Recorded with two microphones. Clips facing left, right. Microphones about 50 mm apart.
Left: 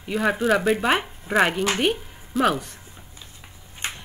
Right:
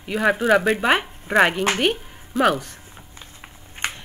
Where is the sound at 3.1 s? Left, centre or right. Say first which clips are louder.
Right 3 dB; right.